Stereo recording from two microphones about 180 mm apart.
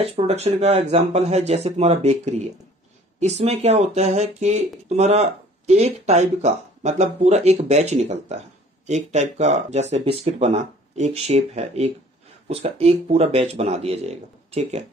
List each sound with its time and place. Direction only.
0.0 s speech: 35° right (ahead or behind)